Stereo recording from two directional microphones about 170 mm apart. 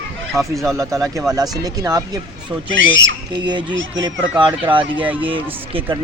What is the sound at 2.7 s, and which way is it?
Speech, 90° right.